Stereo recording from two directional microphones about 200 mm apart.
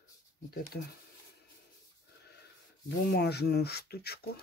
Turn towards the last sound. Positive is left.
turn(degrees=50)  # may be behind; listen again after turning